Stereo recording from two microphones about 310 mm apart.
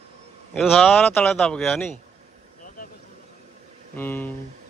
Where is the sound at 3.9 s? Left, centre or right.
Centre.